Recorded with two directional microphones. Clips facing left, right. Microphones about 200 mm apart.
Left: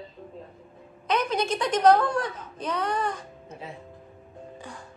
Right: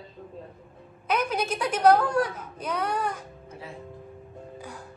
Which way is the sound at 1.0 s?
10° right (ahead or behind).